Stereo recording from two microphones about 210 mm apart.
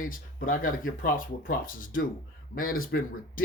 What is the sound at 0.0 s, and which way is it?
Speech, 40° left (ahead or behind).